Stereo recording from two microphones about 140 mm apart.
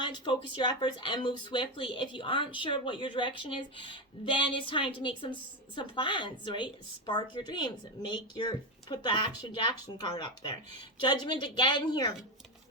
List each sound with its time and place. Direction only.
0.0 s speech: 35° left (ahead or behind)